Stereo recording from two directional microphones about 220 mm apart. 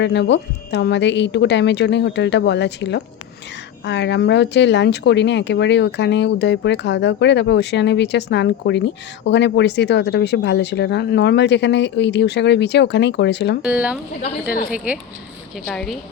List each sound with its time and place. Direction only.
0.0 s speech: 50° left (ahead or behind)
13.6 s speech: 5° right (ahead or behind)
15.6 s speech: centre (ahead or behind)